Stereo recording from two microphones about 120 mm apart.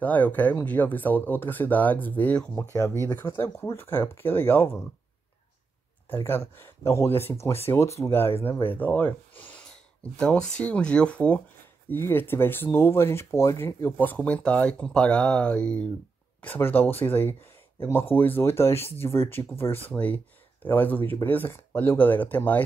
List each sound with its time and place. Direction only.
0.0 s speech: 15° left (ahead or behind)
2.7 s speech: 20° left (ahead or behind)
6.0 s speech: 20° left (ahead or behind)